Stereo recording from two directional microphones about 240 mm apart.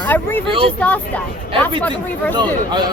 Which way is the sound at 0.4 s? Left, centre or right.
Right.